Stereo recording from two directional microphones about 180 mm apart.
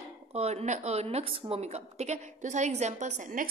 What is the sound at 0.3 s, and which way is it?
A woman's voice, 35° right (ahead or behind).